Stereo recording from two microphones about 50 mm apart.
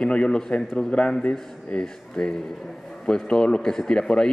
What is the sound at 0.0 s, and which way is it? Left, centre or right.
A man's voice, centre.